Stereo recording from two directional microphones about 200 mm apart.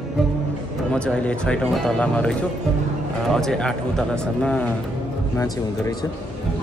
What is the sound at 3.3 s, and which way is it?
Speech, 5° left (ahead or behind).